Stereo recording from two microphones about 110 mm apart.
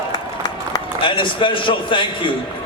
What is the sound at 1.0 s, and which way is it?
A man's voice, 50° left (ahead or behind).